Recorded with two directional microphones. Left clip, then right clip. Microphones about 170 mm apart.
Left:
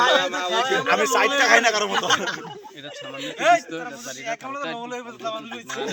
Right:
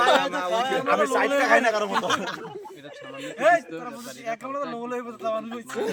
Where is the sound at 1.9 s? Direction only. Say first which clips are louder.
Left 3 dB; 10° right (ahead or behind).